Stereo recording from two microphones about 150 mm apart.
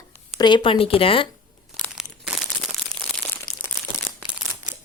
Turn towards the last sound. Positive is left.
turn(degrees=15)  # may be behind; listen again after turning